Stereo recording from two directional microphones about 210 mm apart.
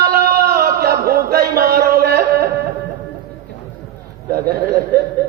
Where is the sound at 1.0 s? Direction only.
45° right (ahead or behind).